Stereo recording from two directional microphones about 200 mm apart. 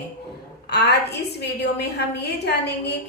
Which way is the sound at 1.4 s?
55° left (ahead or behind).